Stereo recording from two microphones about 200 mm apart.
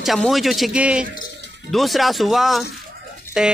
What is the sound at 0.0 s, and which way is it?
A man's voice, centre (ahead or behind).